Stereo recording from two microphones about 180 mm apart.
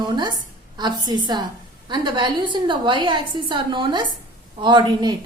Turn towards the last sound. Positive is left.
turn(degrees=-25)  # may be behind; listen again after turning